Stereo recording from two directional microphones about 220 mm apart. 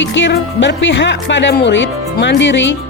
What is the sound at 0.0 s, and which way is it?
Speech, 55° left (ahead or behind).